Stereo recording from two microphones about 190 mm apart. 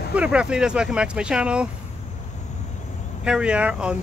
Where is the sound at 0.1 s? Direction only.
5° right (ahead or behind).